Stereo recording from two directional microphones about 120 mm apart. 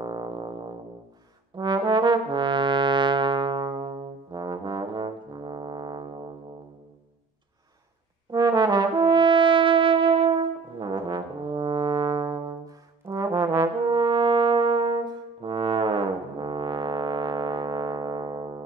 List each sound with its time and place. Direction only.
0.0 s music: 40° right (ahead or behind)
1.6 s trombone: 40° right (ahead or behind)
8.3 s brass instrument: 35° right (ahead or behind)
13.0 s brass instrument: 25° right (ahead or behind)
13.5 s brass instrument: 45° right (ahead or behind)